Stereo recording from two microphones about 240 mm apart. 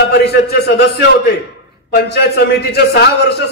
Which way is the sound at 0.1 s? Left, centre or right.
Left.